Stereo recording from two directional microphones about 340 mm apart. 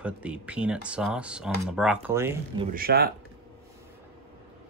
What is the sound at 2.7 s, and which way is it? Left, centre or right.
Speech, right.